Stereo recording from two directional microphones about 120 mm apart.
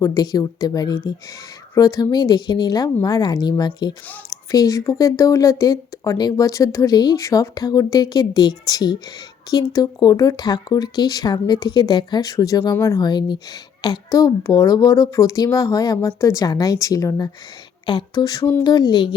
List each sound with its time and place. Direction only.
0.0 s a woman's voice: 30° left (ahead or behind)